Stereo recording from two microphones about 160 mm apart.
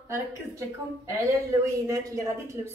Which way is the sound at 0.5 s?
20° right (ahead or behind).